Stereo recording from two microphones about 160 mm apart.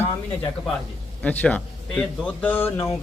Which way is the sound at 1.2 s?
10° left (ahead or behind).